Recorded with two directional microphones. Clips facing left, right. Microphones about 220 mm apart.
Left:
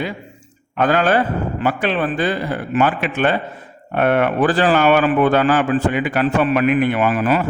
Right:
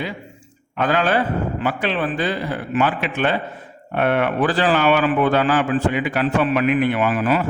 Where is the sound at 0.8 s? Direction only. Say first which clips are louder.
Left 3 dB; 45° left (ahead or behind).